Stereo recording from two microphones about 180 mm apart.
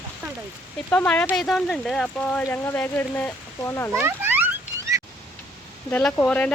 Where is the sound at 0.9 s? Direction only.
5° left (ahead or behind).